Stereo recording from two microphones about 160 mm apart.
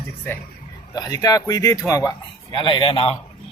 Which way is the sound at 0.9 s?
25° left (ahead or behind).